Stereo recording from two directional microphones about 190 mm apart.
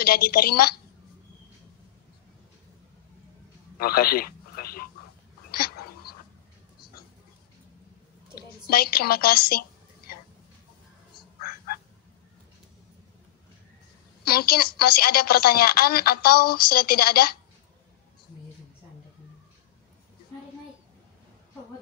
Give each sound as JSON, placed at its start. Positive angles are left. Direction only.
{"t": 0.0, "sound": "speech", "side_deg": 50}
{"t": 3.8, "sound": "a sound", "side_deg": 50}
{"t": 8.6, "sound": "a woman's voice", "side_deg": 55}
{"t": 14.2, "sound": "speech", "side_deg": 55}